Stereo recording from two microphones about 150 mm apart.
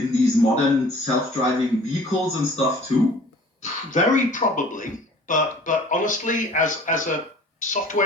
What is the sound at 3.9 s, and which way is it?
Speech, 55° left (ahead or behind).